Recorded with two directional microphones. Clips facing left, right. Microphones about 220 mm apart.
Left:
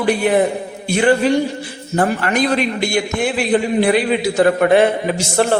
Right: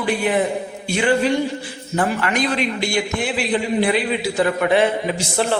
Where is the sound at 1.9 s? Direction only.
40° left (ahead or behind).